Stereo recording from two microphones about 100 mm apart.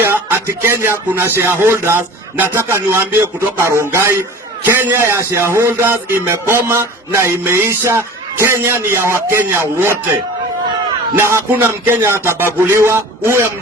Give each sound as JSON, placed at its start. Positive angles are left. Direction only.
{"t": 0.0, "sound": "music", "side_deg": -20}
{"t": 1.4, "sound": "speech", "side_deg": -25}
{"t": 11.2, "sound": "speech", "side_deg": -25}